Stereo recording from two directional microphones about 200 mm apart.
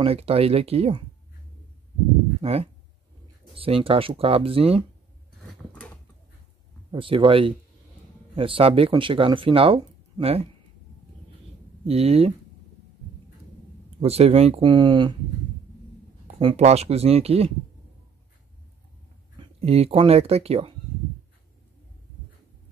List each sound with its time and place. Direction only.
0.0 s speech: 30° right (ahead or behind)
2.4 s speech: 30° right (ahead or behind)
6.9 s speech: 25° right (ahead or behind)
11.8 s speech: 30° right (ahead or behind)
13.9 s speech: 30° right (ahead or behind)
16.3 s speech: 25° right (ahead or behind)
19.6 s speech: 30° right (ahead or behind)